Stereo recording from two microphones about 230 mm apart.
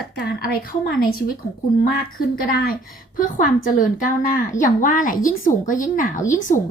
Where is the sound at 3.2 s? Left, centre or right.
Left.